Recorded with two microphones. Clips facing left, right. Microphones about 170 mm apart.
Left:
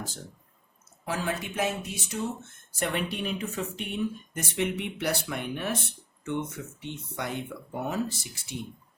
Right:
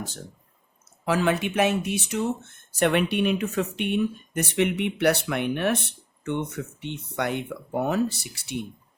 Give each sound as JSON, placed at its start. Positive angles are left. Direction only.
{"t": 0.9, "sound": "speech", "side_deg": -70}